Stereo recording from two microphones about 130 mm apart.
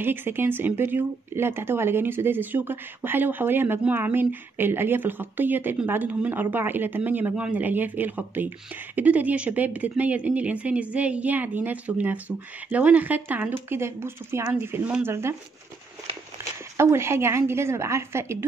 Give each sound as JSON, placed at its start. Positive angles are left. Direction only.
{"t": 0.0, "sound": "speech", "side_deg": -15}
{"t": 16.7, "sound": "a woman's voice", "side_deg": -20}